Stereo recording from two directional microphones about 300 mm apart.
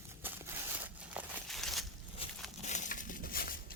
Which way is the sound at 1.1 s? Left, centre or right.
Centre.